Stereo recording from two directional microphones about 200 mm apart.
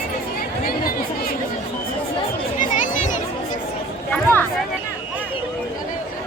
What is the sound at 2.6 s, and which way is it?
Chatter, 40° left (ahead or behind).